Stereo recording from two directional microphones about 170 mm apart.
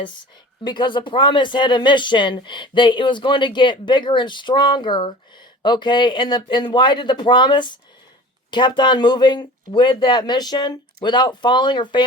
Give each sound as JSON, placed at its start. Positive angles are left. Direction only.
{"t": 0.6, "sound": "speech", "side_deg": 25}